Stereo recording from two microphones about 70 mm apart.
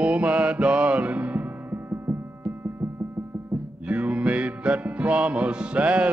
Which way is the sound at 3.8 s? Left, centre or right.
Centre.